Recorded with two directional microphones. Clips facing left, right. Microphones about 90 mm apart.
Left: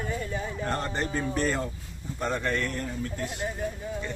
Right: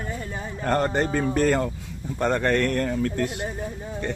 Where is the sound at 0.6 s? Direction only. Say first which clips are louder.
Right 10 dB; 55° right (ahead or behind).